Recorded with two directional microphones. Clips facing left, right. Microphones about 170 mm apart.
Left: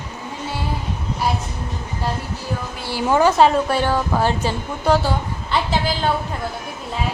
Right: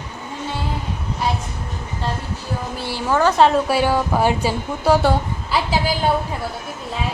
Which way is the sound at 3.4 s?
Centre (ahead or behind).